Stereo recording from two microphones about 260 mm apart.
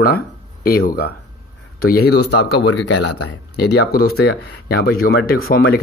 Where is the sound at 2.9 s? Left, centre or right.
Left.